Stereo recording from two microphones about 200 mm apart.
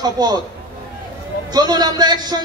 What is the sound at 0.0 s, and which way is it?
Speech, 20° right (ahead or behind).